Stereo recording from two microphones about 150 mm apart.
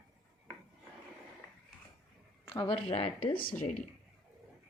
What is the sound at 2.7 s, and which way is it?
Speech, 45° left (ahead or behind).